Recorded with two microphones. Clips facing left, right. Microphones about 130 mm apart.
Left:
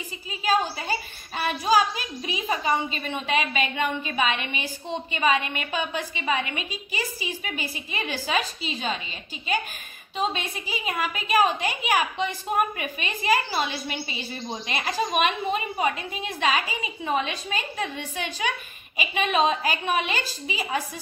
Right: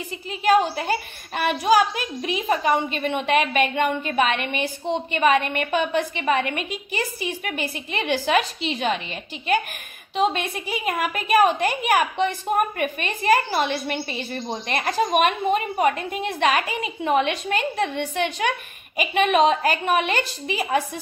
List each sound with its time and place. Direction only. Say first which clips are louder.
0.3 s a woman's voice: right 6 dB; 60° right (ahead or behind)